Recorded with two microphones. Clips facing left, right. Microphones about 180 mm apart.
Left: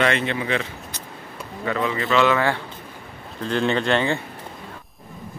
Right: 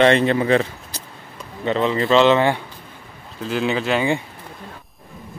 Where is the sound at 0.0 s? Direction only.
35° right (ahead or behind).